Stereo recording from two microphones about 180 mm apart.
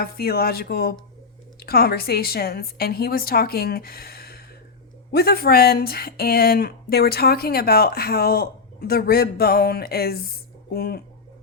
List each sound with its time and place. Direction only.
0.0 s speech: 55° left (ahead or behind)